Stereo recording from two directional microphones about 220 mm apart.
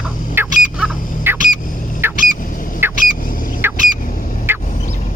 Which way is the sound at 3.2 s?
40° left (ahead or behind).